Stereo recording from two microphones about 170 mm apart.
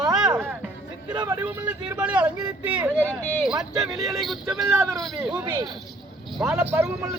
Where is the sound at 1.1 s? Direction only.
25° right (ahead or behind).